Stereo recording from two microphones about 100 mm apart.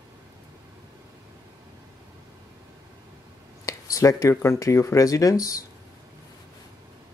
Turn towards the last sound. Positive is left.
turn(degrees=35)  # may be behind; listen again after turning